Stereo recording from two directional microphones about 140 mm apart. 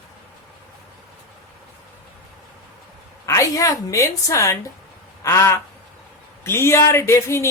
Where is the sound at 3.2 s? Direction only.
20° left (ahead or behind).